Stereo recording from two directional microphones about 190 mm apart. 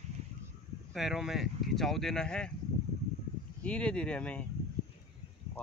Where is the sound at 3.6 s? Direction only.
5° left (ahead or behind).